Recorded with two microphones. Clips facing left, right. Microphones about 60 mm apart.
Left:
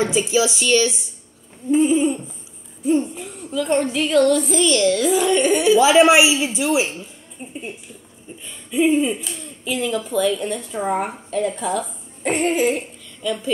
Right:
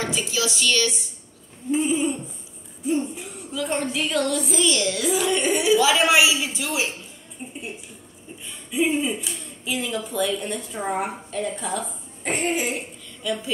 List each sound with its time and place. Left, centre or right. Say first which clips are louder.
0.0 s speech: left 7 dB; left
1.7 s speech: left 6 dB; centre
5.8 s speech: left 8 dB; left
7.4 s a sound: left 1 dB; centre
8.7 s a child's voice: left 5 dB; centre